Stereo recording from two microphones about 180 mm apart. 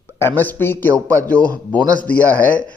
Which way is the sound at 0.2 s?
10° left (ahead or behind).